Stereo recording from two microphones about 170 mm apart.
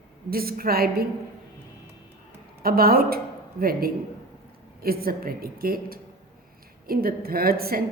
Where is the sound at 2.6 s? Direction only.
60° right (ahead or behind).